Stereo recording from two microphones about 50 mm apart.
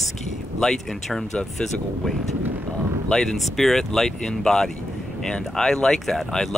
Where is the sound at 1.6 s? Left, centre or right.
Left.